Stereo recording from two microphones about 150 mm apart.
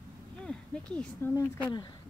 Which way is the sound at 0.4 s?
5° left (ahead or behind).